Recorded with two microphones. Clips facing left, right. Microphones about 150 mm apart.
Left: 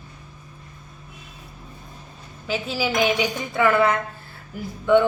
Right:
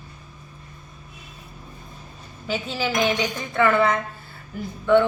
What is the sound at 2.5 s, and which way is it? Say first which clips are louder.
A woman's voice: left 1 dB; 5° left (ahead or behind).